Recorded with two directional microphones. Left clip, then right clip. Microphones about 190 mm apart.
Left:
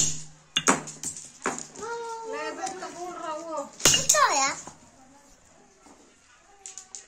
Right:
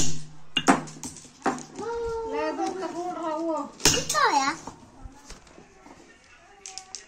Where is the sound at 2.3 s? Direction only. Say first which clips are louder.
Right 3 dB; 5° right (ahead or behind).